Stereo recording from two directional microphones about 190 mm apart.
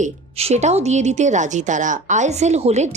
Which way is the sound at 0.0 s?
35° right (ahead or behind).